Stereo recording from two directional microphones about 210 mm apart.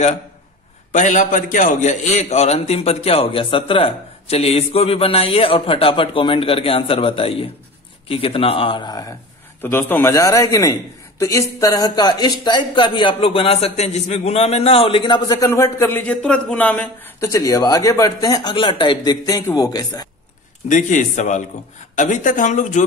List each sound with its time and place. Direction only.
0.9 s a man's voice: 35° left (ahead or behind); by 9.0 s 20° left (ahead or behind)
9.6 s a man's voice: 10° left (ahead or behind)
20.6 s speech: 35° left (ahead or behind)